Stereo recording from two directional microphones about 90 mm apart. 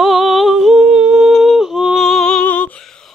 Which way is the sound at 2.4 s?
15° left (ahead or behind).